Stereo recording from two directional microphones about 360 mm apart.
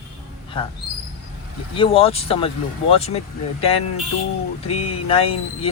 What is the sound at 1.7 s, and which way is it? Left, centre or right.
Speech, centre.